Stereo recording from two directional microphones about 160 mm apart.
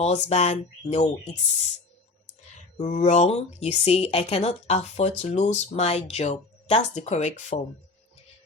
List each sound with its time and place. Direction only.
0.0 s speech: 45° left (ahead or behind)
2.7 s speech: 45° left (ahead or behind)